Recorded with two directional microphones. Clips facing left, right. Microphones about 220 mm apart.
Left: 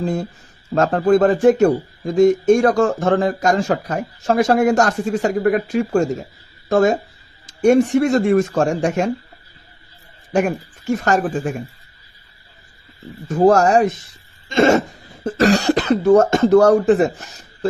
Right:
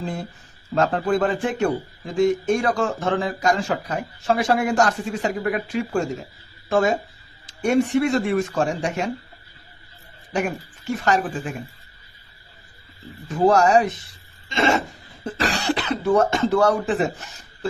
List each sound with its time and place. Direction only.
0.0 s speech: 45° left (ahead or behind)
10.3 s speech: 45° left (ahead or behind)
13.2 s speech: 45° left (ahead or behind)